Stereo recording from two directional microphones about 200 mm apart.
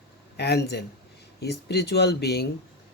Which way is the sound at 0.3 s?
55° left (ahead or behind).